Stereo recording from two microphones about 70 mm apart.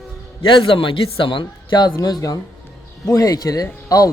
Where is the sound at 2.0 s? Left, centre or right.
Left.